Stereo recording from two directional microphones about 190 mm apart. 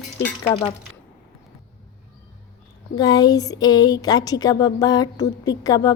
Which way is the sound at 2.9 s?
20° left (ahead or behind).